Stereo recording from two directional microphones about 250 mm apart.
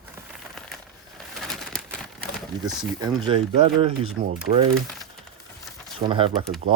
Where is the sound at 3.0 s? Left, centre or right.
Centre.